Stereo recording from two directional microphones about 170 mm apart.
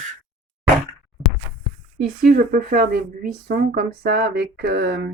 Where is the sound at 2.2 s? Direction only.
65° right (ahead or behind); by 5.1 s 85° right.